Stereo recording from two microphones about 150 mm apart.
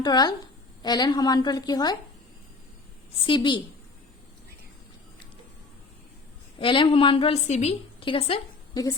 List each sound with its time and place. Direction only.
0.0 s a woman's voice: 30° left (ahead or behind)
3.2 s speech: 35° left (ahead or behind)
6.6 s speech: 35° left (ahead or behind)
7.4 s a woman's voice: 45° left (ahead or behind)
8.0 s a woman's voice: 35° left (ahead or behind)